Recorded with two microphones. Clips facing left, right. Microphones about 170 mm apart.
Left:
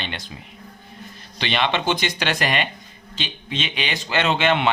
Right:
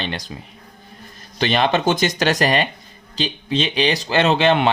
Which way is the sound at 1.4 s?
40° right (ahead or behind).